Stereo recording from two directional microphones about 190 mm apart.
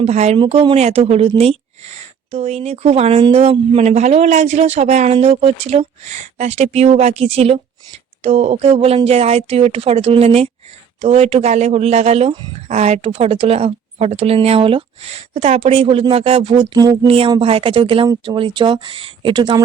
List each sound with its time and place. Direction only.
0.0 s speech: 35° right (ahead or behind)